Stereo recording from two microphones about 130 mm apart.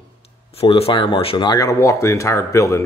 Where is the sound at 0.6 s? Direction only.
45° left (ahead or behind).